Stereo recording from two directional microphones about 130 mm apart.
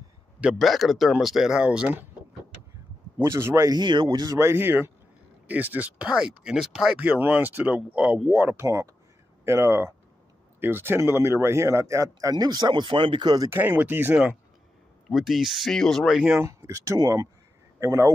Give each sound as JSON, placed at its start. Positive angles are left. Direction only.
{"t": 0.4, "sound": "speech", "side_deg": -5}
{"t": 3.2, "sound": "speech", "side_deg": -20}
{"t": 13.5, "sound": "speech", "side_deg": -15}
{"t": 15.0, "sound": "speech", "side_deg": 0}
{"t": 16.3, "sound": "a man's voice", "side_deg": -25}